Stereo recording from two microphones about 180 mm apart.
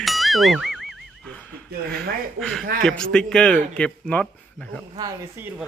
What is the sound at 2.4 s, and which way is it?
Speech, centre (ahead or behind).